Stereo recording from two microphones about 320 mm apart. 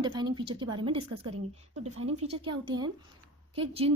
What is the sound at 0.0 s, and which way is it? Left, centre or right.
A woman's voice, centre.